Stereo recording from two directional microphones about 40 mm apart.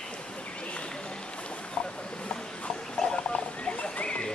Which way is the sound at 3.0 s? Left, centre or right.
Left.